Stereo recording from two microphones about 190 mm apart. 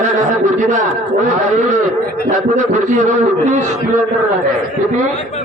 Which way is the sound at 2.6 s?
40° right (ahead or behind).